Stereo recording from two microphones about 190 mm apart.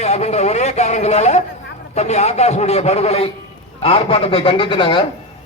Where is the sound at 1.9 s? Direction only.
35° left (ahead or behind).